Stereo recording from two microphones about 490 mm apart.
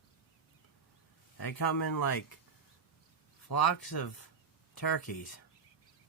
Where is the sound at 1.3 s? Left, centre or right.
Left.